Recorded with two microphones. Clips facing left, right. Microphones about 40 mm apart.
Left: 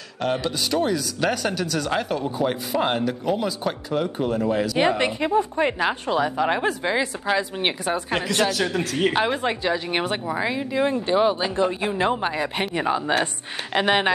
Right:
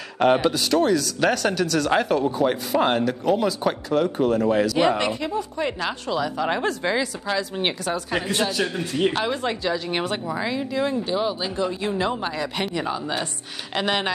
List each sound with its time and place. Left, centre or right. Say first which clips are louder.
0.4 s speech: right 3 dB; centre
4.7 s speech: even; centre
6.3 s speech: left 2 dB; centre
8.2 s a man's voice: left 1 dB; left
8.9 s speech: even; left
11.5 s speech: left 2 dB; left